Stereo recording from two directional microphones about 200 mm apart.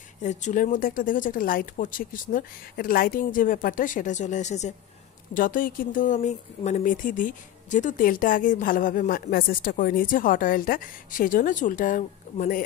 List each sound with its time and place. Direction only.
0.2 s speech: 35° left (ahead or behind)